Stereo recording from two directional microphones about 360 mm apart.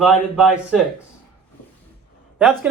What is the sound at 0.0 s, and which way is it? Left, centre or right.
Speech, centre.